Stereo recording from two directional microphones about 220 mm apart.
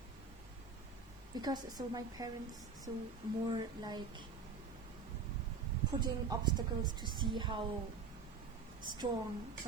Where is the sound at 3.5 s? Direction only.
20° right (ahead or behind).